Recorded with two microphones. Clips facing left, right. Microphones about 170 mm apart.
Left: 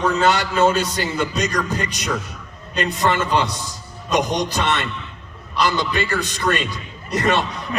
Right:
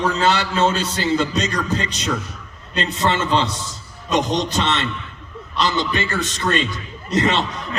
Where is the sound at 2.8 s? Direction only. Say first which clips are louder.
Left 1 dB; 25° right (ahead or behind).